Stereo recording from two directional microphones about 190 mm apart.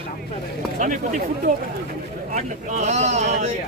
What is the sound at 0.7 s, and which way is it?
A man's voice, 40° right (ahead or behind).